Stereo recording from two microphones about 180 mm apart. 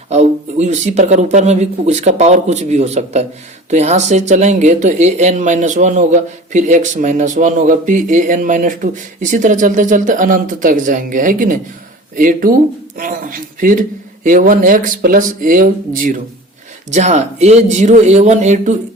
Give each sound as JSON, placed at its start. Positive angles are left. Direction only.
{"t": 0.1, "sound": "speech", "side_deg": -40}